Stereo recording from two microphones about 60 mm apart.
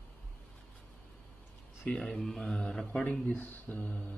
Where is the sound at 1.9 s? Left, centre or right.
Centre.